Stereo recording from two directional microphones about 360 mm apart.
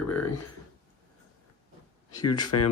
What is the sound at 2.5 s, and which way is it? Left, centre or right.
Speech, left.